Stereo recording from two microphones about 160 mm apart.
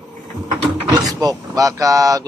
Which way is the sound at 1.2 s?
20° right (ahead or behind).